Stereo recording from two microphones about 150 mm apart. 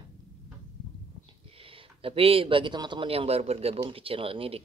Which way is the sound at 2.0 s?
40° right (ahead or behind).